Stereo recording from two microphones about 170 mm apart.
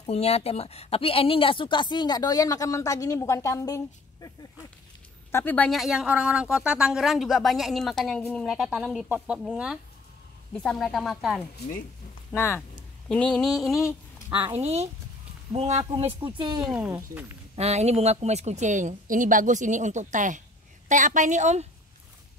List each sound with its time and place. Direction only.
0.0 s a woman's voice: 35° left (ahead or behind); by 4.3 s 20° left (ahead or behind)
5.3 s speech: 10° left (ahead or behind)
10.5 s speech: 5° left (ahead or behind)
12.3 s speech: 15° left (ahead or behind)
13.1 s speech: 5° left (ahead or behind)
14.6 s speech: 40° right (ahead or behind)
15.8 s speech: 30° right (ahead or behind)
16.6 s speech: 5° right (ahead or behind)
17.6 s a woman's voice: 40° right (ahead or behind)